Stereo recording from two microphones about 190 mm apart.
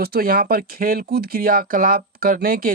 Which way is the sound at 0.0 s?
55° right (ahead or behind).